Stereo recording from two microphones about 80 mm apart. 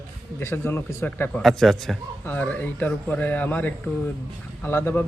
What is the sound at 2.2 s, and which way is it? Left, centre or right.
A man's voice, centre.